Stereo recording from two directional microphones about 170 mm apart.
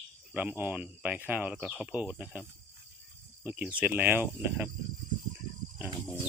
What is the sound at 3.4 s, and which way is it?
Cricket, 10° right (ahead or behind).